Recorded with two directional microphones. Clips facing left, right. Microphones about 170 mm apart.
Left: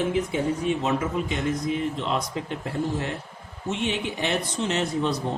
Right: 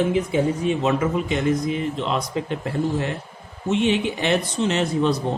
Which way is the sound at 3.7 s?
90° right.